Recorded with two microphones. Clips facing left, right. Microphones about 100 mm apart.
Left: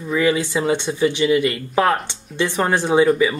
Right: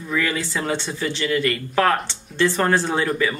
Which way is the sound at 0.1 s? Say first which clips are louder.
Left 6 dB; 15° left (ahead or behind).